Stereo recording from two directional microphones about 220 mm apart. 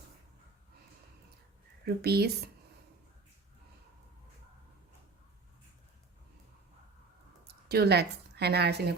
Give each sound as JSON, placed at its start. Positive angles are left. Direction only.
{"t": 1.8, "sound": "speech", "side_deg": -45}
{"t": 7.4, "sound": "speech", "side_deg": -45}